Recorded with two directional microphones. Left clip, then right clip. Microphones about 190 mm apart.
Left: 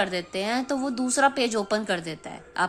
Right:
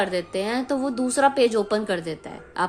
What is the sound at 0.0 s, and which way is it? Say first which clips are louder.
A woman's voice: right 2 dB; 10° left (ahead or behind).